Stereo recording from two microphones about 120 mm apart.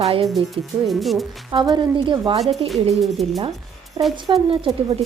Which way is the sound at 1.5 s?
40° right (ahead or behind).